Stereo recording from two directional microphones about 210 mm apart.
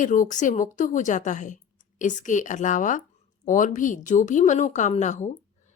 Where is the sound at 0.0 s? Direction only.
40° left (ahead or behind).